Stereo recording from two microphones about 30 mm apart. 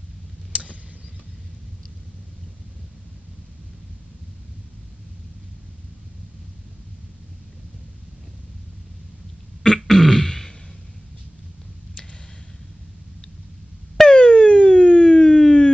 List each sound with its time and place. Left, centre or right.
9.8 s throat clearing: centre
11.9 s a sound: left
14.0 s siren: left